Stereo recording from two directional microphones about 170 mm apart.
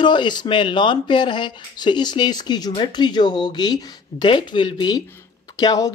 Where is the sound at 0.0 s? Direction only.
25° left (ahead or behind).